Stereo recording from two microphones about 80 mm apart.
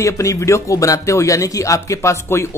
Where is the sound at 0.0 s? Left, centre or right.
Left.